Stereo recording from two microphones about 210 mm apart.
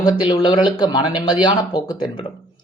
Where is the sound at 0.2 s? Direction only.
20° left (ahead or behind).